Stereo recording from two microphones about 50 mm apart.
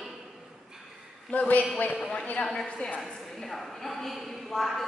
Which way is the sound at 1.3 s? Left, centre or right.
Left.